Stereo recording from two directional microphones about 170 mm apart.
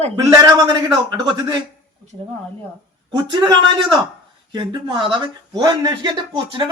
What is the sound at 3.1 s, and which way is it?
Speech, 25° right (ahead or behind).